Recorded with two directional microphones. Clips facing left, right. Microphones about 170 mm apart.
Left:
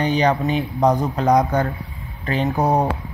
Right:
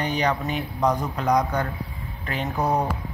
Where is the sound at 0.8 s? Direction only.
40° left (ahead or behind).